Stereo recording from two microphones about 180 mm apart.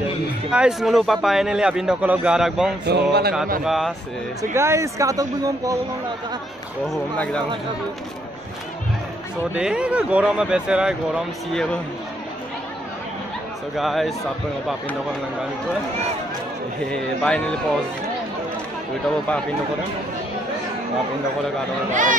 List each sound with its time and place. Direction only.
0.5 s a man's voice: 5° right (ahead or behind)
2.9 s a sound: 65° right (ahead or behind)
3.6 s a man's voice: centre (ahead or behind)
4.4 s speech: 15° right (ahead or behind)
9.6 s a man's voice: 5° right (ahead or behind)
13.7 s a man's voice: centre (ahead or behind)
16.9 s a man's voice: 5° left (ahead or behind)